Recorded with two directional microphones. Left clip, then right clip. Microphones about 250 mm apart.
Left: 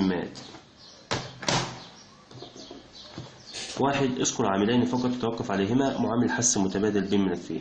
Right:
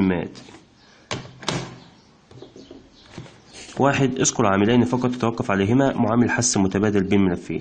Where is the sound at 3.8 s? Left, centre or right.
Right.